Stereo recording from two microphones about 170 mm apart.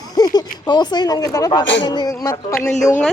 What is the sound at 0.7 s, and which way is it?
Speech, 25° left (ahead or behind).